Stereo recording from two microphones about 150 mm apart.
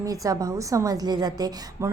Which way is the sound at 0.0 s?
25° right (ahead or behind).